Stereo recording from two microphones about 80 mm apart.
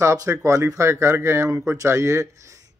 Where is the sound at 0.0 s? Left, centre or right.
Right.